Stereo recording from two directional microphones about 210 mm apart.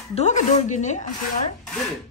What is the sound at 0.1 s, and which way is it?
Speech, 35° left (ahead or behind).